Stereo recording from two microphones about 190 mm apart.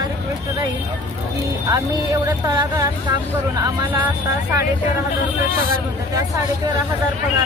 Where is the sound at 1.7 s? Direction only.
20° right (ahead or behind).